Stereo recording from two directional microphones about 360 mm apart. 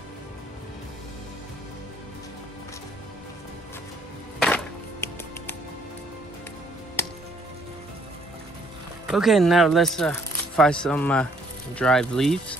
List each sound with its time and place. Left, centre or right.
7.0 s music: centre
9.0 s speech: centre